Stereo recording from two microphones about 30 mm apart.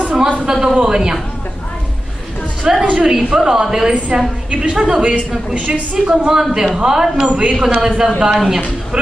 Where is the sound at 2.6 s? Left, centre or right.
Right.